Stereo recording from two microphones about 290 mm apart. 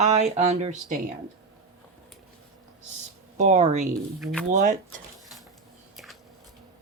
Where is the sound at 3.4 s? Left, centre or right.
Right.